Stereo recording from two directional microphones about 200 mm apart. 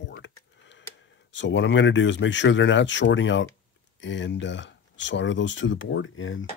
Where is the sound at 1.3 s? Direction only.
65° left (ahead or behind).